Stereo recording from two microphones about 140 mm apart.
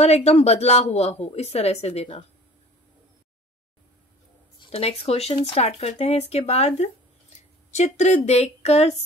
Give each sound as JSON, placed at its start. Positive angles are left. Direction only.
{"t": 0.0, "sound": "a woman's voice", "side_deg": 50}
{"t": 4.6, "sound": "a woman's voice", "side_deg": 45}